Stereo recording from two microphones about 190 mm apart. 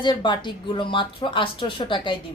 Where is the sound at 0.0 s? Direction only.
25° left (ahead or behind).